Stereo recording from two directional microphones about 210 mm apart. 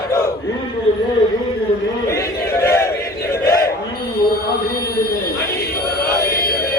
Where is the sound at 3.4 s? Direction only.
45° left (ahead or behind).